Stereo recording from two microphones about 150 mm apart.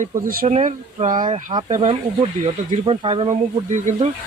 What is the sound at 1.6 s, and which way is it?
Speech, 45° right (ahead or behind).